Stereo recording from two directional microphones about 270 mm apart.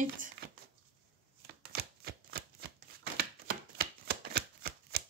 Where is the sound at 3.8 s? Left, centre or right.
Right.